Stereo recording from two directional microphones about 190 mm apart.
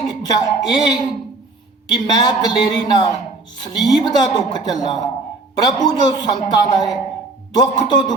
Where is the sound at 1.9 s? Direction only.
20° left (ahead or behind).